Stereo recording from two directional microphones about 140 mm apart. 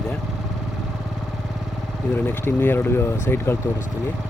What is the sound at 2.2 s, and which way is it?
Speech, 15° left (ahead or behind).